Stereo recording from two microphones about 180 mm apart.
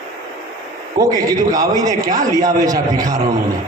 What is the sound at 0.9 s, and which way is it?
A man's voice, 20° right (ahead or behind).